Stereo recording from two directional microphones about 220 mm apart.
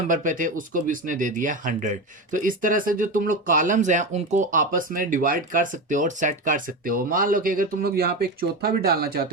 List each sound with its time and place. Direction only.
0.1 s speech: 35° right (ahead or behind)